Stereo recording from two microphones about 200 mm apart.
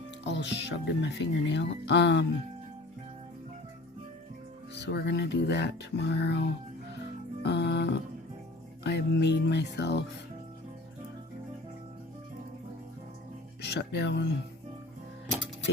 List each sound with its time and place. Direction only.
0.3 s speech: 60° left (ahead or behind)
4.7 s speech: 60° left (ahead or behind)
7.4 s music: 60° left (ahead or behind)
13.6 s speech: 55° left (ahead or behind)